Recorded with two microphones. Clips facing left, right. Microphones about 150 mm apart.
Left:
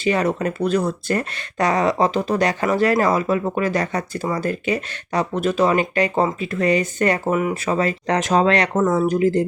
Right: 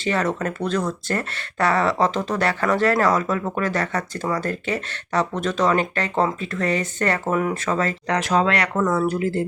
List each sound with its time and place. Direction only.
0.0 s speech: 15° left (ahead or behind)
8.0 s speech: 25° left (ahead or behind)